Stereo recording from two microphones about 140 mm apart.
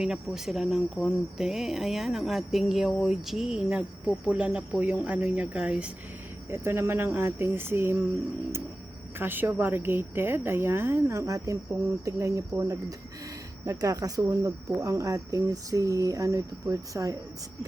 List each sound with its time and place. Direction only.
0.0 s speech: 5° right (ahead or behind)
9.1 s speech: 15° right (ahead or behind)